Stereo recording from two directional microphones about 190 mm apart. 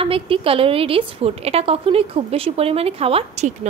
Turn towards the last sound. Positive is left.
turn(degrees=-35)  # may be behind; listen again after turning